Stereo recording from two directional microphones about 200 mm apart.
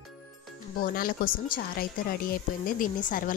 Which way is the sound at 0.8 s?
45° left (ahead or behind).